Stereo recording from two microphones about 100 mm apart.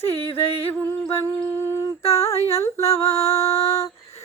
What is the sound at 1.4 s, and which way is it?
Female singing, 25° left (ahead or behind).